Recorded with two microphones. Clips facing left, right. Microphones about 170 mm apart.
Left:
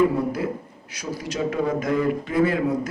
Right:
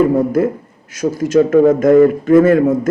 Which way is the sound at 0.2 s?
50° right (ahead or behind).